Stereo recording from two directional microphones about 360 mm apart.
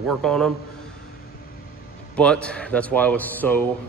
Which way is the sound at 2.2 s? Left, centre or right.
Centre.